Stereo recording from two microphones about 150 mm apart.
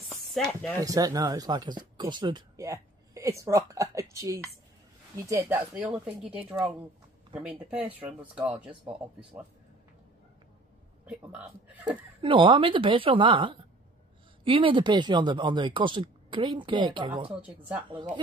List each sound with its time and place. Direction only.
0.1 s a sound: 5° left (ahead or behind)
0.7 s speech: 25° right (ahead or behind); by 9.4 s 10° right (ahead or behind)
11.1 s speech: 10° right (ahead or behind)
12.2 s speech: 35° right (ahead or behind)